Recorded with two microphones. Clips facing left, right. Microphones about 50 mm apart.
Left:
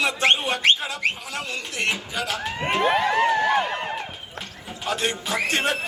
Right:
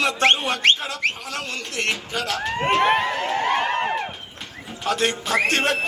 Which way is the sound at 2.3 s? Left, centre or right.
Right.